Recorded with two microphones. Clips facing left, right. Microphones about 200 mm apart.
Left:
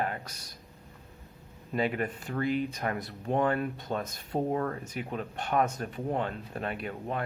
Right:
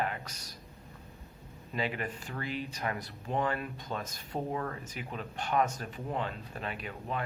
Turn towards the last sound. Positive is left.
turn(degrees=50)  # may be behind; listen again after turning